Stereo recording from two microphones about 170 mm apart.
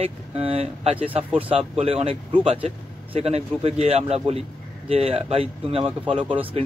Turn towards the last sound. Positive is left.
turn(degrees=-30)  # may be behind; listen again after turning